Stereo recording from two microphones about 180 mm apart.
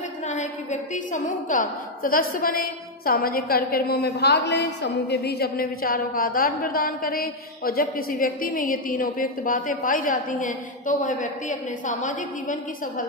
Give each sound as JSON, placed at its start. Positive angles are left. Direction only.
{"t": 0.3, "sound": "a woman's voice", "side_deg": 45}